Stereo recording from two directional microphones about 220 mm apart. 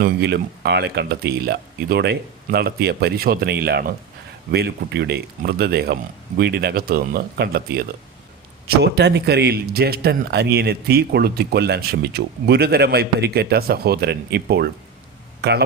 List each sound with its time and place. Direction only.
0.0 s a man's voice: 50° right (ahead or behind)